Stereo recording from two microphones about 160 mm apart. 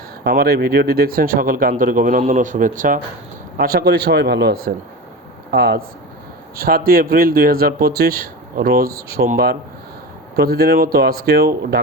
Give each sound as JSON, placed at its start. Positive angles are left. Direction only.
{"t": 0.3, "sound": "speech", "side_deg": -75}
{"t": 3.6, "sound": "speech", "side_deg": -75}
{"t": 6.6, "sound": "a man's voice", "side_deg": -65}